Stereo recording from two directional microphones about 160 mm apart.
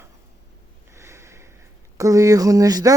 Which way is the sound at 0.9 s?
15° right (ahead or behind).